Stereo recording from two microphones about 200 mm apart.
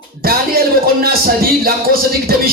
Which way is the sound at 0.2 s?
50° right (ahead or behind).